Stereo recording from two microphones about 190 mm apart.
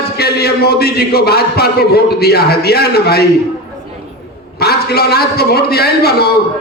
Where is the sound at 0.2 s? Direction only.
55° left (ahead or behind).